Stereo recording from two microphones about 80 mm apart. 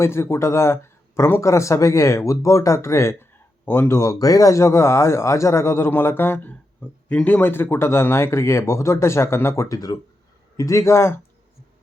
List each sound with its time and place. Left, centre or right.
0.0 s speech: left